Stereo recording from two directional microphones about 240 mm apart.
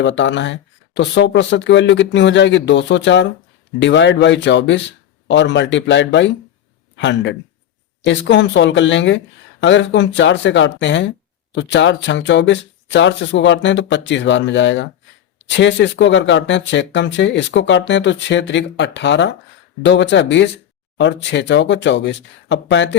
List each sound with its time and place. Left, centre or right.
0.0 s speech: left